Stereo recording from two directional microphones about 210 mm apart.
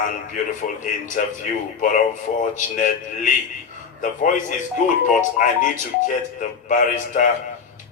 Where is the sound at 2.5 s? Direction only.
40° left (ahead or behind).